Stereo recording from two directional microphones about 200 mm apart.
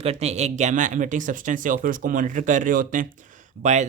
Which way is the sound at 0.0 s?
30° right (ahead or behind).